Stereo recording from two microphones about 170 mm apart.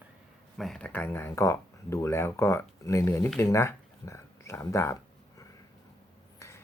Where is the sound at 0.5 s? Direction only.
Centre (ahead or behind).